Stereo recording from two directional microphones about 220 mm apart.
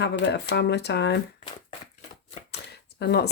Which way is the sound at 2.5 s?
50° left (ahead or behind).